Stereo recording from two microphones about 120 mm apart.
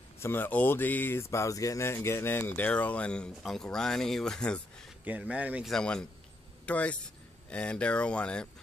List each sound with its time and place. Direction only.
0.2 s speech: 20° left (ahead or behind)
5.0 s speech: 15° right (ahead or behind)
5.7 s a man's voice: 5° left (ahead or behind)